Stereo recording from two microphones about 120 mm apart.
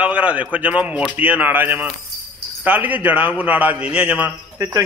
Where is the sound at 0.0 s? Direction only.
10° right (ahead or behind).